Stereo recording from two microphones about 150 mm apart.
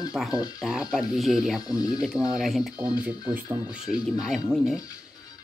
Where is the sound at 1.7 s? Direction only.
25° left (ahead or behind).